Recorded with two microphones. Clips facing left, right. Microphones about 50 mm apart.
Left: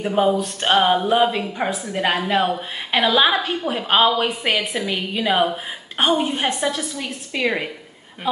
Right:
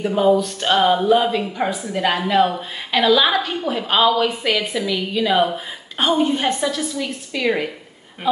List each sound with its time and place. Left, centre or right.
0.0 s a woman's voice: left